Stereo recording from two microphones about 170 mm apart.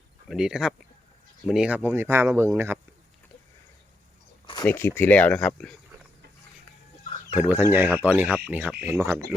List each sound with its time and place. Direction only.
0.3 s speech: 5° right (ahead or behind)
4.4 s a sound: 25° left (ahead or behind)
4.7 s speech: 15° left (ahead or behind)
7.3 s speech: 10° right (ahead or behind)